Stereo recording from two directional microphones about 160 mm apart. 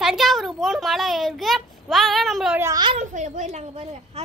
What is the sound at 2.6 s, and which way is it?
Speech, 20° right (ahead or behind).